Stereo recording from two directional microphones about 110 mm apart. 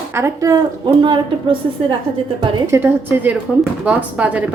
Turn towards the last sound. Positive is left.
turn(degrees=-10)  # may be behind; listen again after turning